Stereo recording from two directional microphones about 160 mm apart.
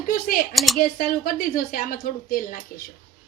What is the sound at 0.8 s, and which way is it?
Speech, 65° left (ahead or behind).